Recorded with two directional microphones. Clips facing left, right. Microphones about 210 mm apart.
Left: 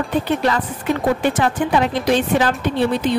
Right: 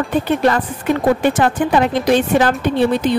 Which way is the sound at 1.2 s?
50° right (ahead or behind).